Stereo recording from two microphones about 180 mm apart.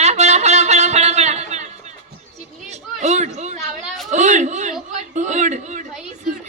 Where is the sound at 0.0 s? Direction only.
40° right (ahead or behind).